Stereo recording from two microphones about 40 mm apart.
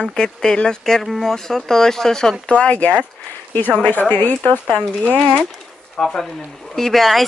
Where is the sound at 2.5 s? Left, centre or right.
Left.